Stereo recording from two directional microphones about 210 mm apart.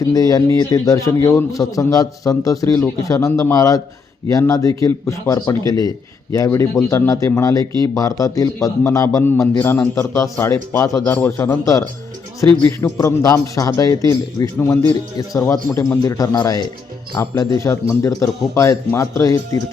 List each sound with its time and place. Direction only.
0.0 s a man's voice: 15° left (ahead or behind)